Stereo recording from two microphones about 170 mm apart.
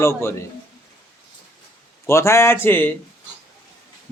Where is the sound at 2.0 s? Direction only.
15° left (ahead or behind).